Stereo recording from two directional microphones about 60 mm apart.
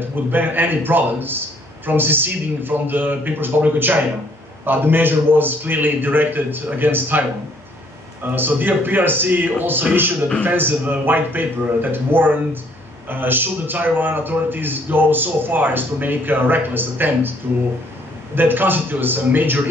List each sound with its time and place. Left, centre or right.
0.3 s a man's voice: right
8.4 s a man's voice: right
18.3 s a man's voice: right